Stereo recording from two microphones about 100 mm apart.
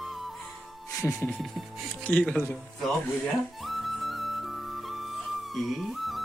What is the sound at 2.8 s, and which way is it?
Flute, centre (ahead or behind).